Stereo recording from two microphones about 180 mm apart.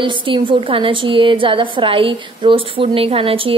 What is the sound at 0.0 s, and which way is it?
A woman's voice, 25° right (ahead or behind).